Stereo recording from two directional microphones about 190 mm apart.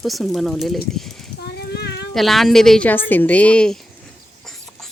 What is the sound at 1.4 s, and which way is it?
Child singing, 60° left (ahead or behind).